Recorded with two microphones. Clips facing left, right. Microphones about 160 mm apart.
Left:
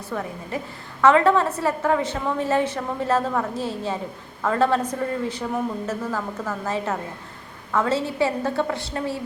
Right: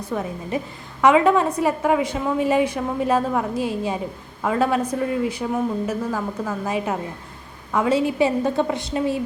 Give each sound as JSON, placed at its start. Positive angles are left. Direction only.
{"t": 0.0, "sound": "a woman's voice", "side_deg": -20}